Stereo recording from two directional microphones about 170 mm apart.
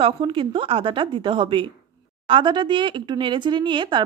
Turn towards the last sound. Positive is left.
turn(degrees=-30)  # may be behind; listen again after turning